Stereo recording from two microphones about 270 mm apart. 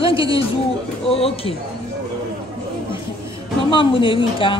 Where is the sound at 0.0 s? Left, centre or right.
Centre.